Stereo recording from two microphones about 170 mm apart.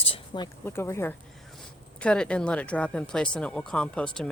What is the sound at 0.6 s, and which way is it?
Speech, 15° left (ahead or behind).